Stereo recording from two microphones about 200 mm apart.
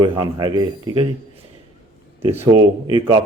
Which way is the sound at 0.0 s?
20° right (ahead or behind).